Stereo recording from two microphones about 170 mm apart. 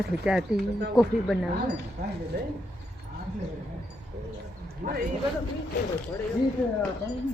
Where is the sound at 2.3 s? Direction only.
70° right (ahead or behind).